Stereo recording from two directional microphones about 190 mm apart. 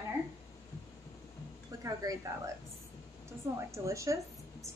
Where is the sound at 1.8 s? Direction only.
15° right (ahead or behind).